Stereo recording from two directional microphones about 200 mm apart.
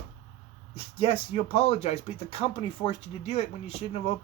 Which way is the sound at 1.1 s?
30° left (ahead or behind).